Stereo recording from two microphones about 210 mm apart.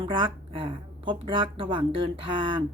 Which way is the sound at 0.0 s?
25° right (ahead or behind).